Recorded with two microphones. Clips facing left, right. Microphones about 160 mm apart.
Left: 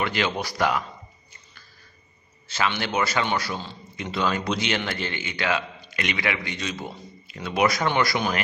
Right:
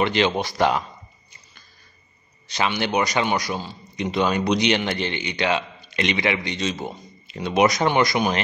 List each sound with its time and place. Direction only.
0.0 s a man's voice: 25° right (ahead or behind)
2.4 s a man's voice: 15° right (ahead or behind)